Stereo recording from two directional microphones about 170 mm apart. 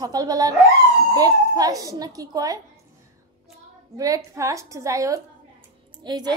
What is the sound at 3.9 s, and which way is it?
A woman's voice, 20° right (ahead or behind).